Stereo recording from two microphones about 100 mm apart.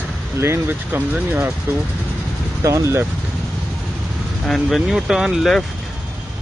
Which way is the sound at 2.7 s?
30° right (ahead or behind).